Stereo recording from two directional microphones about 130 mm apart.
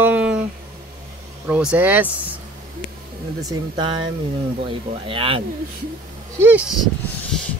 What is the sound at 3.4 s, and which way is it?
Speech, 35° right (ahead or behind).